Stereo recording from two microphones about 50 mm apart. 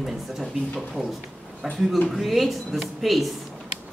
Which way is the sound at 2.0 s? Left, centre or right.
Centre.